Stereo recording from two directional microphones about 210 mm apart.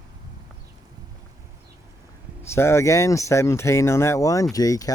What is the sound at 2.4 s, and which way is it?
Speech, 10° left (ahead or behind).